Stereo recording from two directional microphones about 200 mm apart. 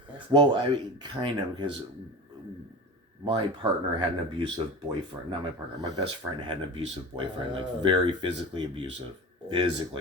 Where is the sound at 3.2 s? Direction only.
20° right (ahead or behind).